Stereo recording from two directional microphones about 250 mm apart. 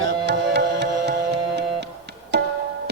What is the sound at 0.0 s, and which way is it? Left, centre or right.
Music, right.